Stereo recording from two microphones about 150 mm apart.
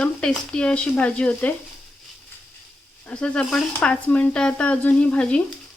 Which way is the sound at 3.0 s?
5° left (ahead or behind).